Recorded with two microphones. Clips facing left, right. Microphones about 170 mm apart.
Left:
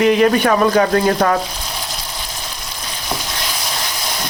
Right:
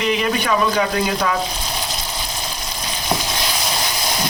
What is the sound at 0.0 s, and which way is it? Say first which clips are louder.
A man's voice: left 7 dB; 50° left (ahead or behind).